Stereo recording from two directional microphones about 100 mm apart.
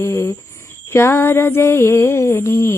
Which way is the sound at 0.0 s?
30° left (ahead or behind).